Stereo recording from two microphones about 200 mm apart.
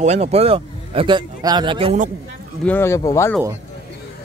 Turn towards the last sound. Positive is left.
turn(degrees=15)  # may be behind; listen again after turning